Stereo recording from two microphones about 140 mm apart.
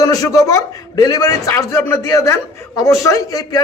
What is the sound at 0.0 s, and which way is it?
A man's voice, 25° left (ahead or behind).